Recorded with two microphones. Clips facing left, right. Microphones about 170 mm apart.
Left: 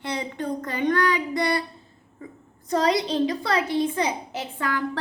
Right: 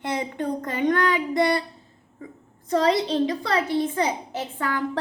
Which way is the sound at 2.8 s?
15° left (ahead or behind).